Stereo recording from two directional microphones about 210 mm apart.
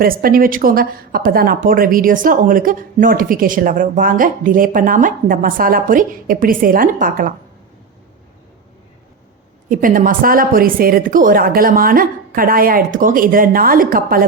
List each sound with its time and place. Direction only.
0.0 s a woman's voice: 45° right (ahead or behind)
9.6 s a woman's voice: 40° right (ahead or behind)